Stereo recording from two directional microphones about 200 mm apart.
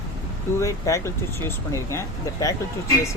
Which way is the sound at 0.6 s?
15° left (ahead or behind).